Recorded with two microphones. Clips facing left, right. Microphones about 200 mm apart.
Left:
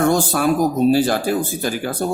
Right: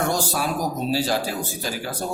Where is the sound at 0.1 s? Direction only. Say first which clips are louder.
Left 7 dB; 55° left (ahead or behind).